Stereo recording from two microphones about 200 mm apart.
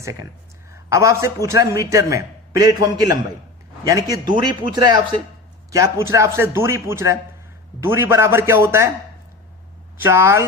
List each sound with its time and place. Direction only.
0.9 s a man's voice: 15° right (ahead or behind)
10.0 s a man's voice: 15° right (ahead or behind)